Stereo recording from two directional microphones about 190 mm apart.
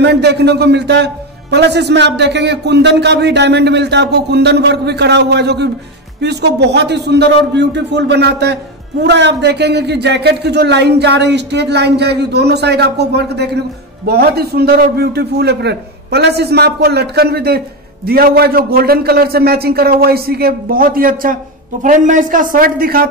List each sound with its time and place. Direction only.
0.0 s a man's voice: 60° right (ahead or behind)